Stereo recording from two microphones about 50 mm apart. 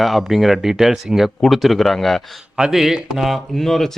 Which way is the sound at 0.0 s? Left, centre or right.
Centre.